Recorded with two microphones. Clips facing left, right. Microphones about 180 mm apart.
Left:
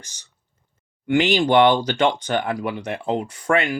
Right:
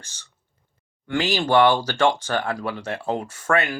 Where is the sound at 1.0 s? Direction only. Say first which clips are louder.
Left 5 dB; 20° left (ahead or behind).